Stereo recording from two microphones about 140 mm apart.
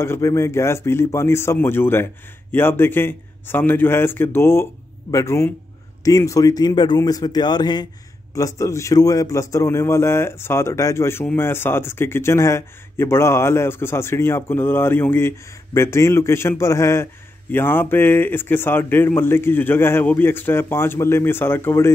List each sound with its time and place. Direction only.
0.0 s a man's voice: 20° left (ahead or behind)